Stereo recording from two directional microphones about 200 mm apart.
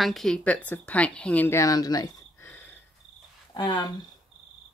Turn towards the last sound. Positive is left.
turn(degrees=20)  # may be behind; listen again after turning